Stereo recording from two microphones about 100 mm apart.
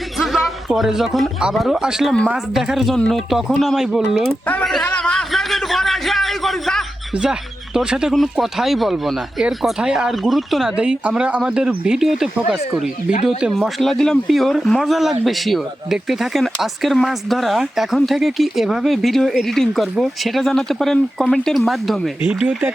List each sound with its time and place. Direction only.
0.2 s speech: centre (ahead or behind)
4.9 s a sound: 10° left (ahead or behind)
7.1 s speech: 5° right (ahead or behind)
22.2 s speech: 15° right (ahead or behind)